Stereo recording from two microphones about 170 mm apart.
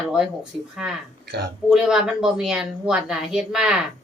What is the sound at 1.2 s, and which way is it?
Speech, 80° right.